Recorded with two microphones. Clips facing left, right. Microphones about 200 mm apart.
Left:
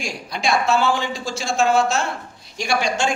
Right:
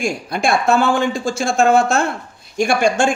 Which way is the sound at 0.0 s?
50° right (ahead or behind).